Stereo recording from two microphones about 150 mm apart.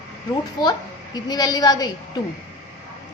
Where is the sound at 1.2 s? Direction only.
25° left (ahead or behind).